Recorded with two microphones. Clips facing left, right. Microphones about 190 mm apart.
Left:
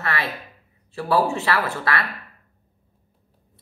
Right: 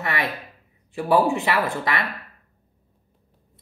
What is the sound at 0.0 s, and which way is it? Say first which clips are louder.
Speech: right 1 dB; 15° right (ahead or behind).